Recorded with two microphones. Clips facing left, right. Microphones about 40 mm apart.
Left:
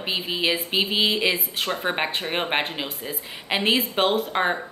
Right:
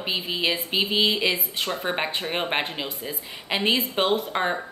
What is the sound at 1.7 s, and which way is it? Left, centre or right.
A woman's voice, centre.